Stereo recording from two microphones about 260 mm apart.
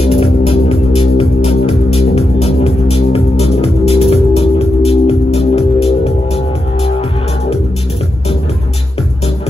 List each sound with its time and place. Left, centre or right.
0.0 s music: left